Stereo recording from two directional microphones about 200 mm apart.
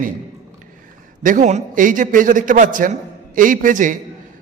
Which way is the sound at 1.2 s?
40° right (ahead or behind).